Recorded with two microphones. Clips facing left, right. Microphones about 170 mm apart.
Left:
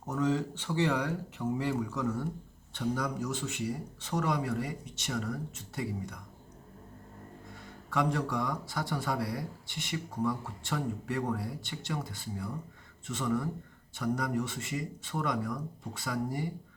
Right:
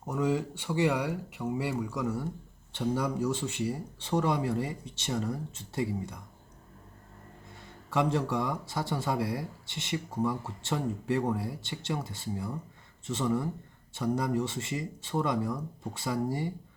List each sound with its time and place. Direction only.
0.0 s speech: 10° right (ahead or behind)
2.7 s speech: 25° right (ahead or behind)
7.9 s speech: 25° right (ahead or behind)